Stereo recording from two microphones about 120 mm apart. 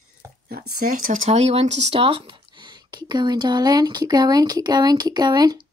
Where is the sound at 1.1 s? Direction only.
70° right (ahead or behind); by 2.2 s 50° right (ahead or behind).